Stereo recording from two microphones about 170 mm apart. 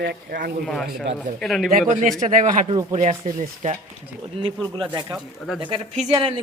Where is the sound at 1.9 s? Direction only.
50° right (ahead or behind).